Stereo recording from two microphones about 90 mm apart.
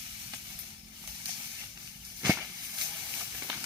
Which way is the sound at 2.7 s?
15° right (ahead or behind).